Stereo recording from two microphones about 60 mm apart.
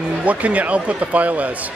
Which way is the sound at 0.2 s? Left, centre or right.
Right.